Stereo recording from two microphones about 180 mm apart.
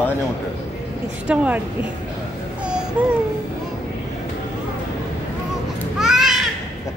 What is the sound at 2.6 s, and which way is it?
Babbling, 5° right (ahead or behind).